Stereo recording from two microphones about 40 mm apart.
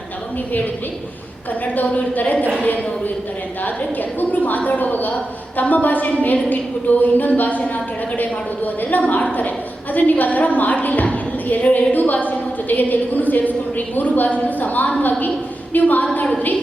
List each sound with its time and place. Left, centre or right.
1.6 s a woman's voice: left
4.2 s a woman's voice: left